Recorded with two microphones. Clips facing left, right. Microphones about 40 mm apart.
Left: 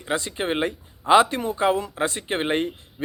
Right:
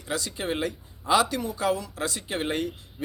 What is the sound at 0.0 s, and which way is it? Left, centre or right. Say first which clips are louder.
Speech: left 5 dB; left.